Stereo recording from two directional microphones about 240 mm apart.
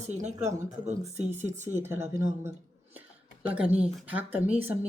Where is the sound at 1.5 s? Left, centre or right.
Right.